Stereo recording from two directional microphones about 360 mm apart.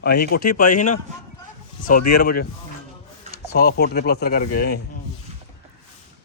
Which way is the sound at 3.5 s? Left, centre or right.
Left.